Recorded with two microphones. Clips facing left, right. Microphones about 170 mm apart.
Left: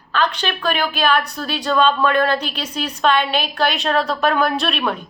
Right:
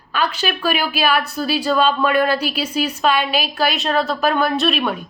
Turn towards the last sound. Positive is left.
turn(degrees=-5)  # may be behind; listen again after turning